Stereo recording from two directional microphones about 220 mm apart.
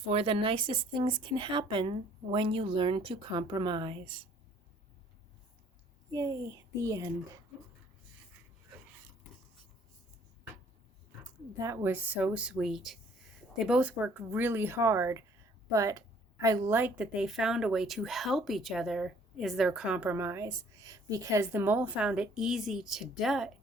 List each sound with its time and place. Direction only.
0.0 s speech: 25° right (ahead or behind)
6.1 s speech: 15° right (ahead or behind)
11.5 s a woman's voice: 15° right (ahead or behind)